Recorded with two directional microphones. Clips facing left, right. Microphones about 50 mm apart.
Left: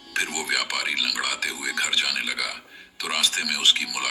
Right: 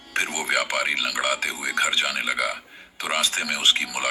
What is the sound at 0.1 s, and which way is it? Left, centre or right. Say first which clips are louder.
Speech: right 2 dB; right.